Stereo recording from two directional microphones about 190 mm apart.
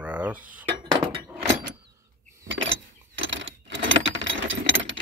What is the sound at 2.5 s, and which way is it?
Keys jangling, 80° right.